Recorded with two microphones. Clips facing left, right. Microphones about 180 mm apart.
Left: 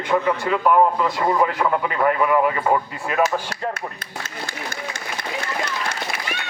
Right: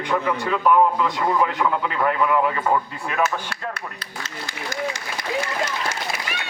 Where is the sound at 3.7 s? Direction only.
50° left (ahead or behind).